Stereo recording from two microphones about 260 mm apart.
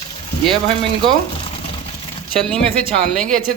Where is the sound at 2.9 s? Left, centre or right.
Centre.